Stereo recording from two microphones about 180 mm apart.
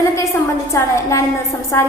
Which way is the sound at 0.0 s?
15° left (ahead or behind).